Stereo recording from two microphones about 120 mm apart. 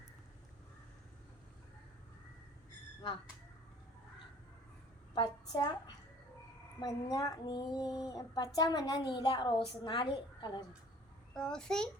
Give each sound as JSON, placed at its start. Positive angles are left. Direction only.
{"t": 5.5, "sound": "speech", "side_deg": 30}
{"t": 6.7, "sound": "speech", "side_deg": 30}
{"t": 11.3, "sound": "a child's voice", "side_deg": 5}